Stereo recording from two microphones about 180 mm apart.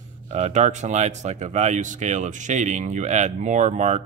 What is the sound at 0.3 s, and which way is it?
Speech, 40° right (ahead or behind).